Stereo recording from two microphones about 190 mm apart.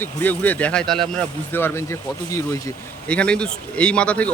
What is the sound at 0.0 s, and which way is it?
Speech, 10° left (ahead or behind).